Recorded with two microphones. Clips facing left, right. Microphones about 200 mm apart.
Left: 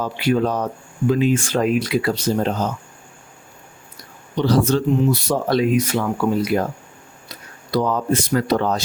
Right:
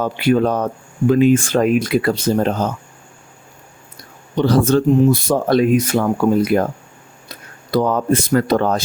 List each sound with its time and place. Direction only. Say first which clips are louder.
0.0 s speech: right 4 dB; 55° right (ahead or behind)
4.4 s speech: right 3 dB; 55° right (ahead or behind)
7.7 s speech: right 3 dB; 50° right (ahead or behind)